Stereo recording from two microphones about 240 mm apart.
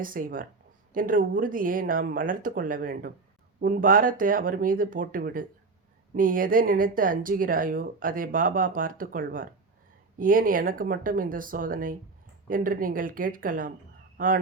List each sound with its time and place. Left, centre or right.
0.0 s speech: right